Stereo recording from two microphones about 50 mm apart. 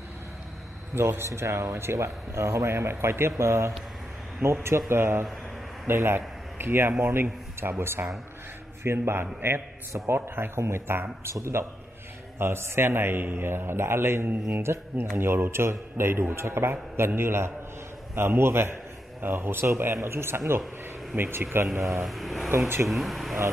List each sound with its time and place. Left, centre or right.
0.9 s a man's voice: right
11.3 s speech: right
15.1 s speech: right
21.7 s speech: right
22.0 s speech: centre
22.5 s speech: right
22.8 s speech: centre